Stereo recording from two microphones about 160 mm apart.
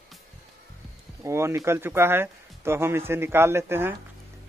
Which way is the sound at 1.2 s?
15° right (ahead or behind).